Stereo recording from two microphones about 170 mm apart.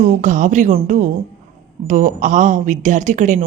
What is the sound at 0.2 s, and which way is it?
Speech, 45° right (ahead or behind).